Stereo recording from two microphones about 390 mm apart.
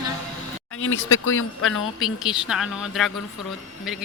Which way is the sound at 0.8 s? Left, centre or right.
Left.